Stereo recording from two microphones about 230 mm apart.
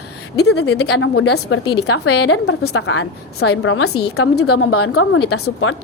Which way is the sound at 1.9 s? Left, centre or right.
Left.